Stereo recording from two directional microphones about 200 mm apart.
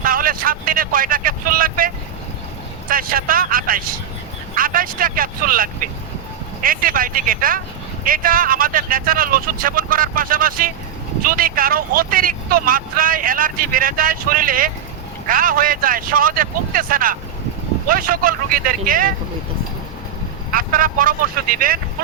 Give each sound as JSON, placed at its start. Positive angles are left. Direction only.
{"t": 0.0, "sound": "speech", "side_deg": -45}
{"t": 2.9, "sound": "speech", "side_deg": -45}
{"t": 20.5, "sound": "speech", "side_deg": -45}